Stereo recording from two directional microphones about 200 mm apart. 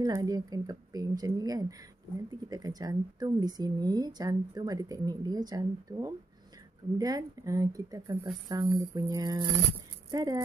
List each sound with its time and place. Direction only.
0.0 s speech: 20° right (ahead or behind)